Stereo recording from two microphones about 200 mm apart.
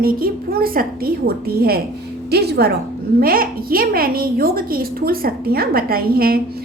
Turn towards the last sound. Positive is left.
turn(degrees=-50)  # may be behind; listen again after turning